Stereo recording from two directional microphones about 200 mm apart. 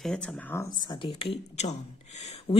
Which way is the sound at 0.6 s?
20° left (ahead or behind).